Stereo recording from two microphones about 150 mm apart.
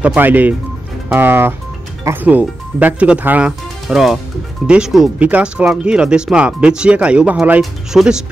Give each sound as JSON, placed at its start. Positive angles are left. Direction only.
{"t": 0.0, "sound": "speech", "side_deg": -10}